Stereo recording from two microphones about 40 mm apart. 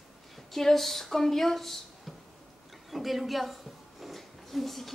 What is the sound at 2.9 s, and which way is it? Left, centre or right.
A woman's voice, centre.